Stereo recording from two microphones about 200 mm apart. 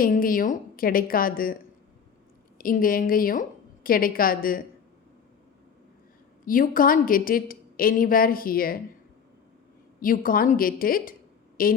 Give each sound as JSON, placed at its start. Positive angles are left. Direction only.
{"t": 0.0, "sound": "a woman's voice", "side_deg": 45}
{"t": 2.6, "sound": "a woman's voice", "side_deg": 45}
{"t": 6.4, "sound": "a woman's voice", "side_deg": 45}
{"t": 10.0, "sound": "a woman's voice", "side_deg": 45}